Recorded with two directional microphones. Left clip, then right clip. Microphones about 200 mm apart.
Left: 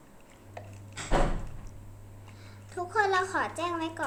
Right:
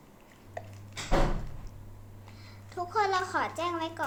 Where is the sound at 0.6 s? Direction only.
20° right (ahead or behind).